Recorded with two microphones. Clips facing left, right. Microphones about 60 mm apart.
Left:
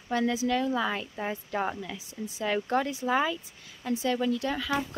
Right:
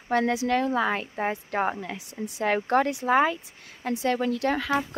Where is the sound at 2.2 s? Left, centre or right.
Right.